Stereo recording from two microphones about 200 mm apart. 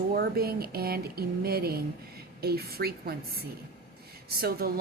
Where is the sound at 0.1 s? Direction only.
50° right (ahead or behind).